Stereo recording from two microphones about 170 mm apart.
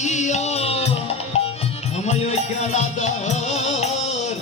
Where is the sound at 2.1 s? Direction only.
40° left (ahead or behind).